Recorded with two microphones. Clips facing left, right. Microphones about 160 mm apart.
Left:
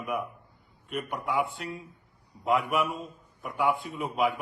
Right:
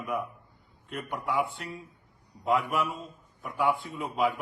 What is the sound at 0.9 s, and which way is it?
Speech, 10° left (ahead or behind).